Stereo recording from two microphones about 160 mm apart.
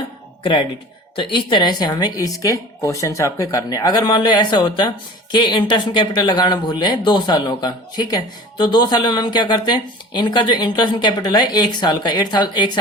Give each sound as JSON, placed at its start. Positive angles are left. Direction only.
{"t": 1.1, "sound": "speech", "side_deg": 30}